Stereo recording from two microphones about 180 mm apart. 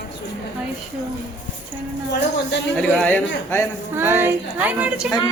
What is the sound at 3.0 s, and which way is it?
Speech, 10° left (ahead or behind).